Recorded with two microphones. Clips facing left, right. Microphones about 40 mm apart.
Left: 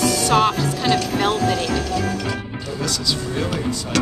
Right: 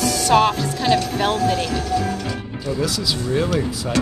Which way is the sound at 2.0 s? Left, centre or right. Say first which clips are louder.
Even; left.